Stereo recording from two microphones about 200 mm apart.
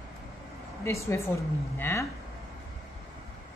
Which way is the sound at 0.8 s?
15° left (ahead or behind).